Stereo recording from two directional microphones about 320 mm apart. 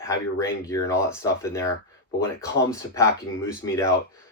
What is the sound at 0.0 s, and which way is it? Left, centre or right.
Speech, centre.